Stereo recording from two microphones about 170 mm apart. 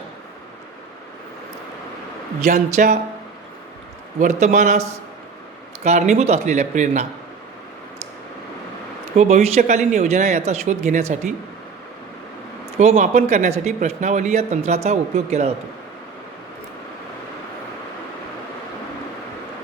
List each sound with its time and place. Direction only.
2.4 s speech: 45° right (ahead or behind)
4.2 s speech: 40° right (ahead or behind)
9.1 s speech: 40° right (ahead or behind)
12.8 s speech: 40° right (ahead or behind)